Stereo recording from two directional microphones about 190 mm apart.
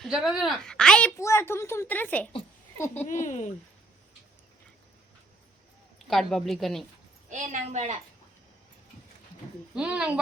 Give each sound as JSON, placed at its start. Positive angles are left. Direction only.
{"t": 0.0, "sound": "a woman's voice", "side_deg": 0}
{"t": 3.1, "sound": "speech", "side_deg": 40}
{"t": 6.1, "sound": "a woman's voice", "side_deg": 0}
{"t": 7.3, "sound": "a woman's voice", "side_deg": -40}
{"t": 9.7, "sound": "a woman's voice", "side_deg": -5}